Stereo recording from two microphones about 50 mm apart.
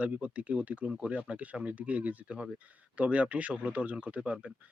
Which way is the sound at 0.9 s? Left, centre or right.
Centre.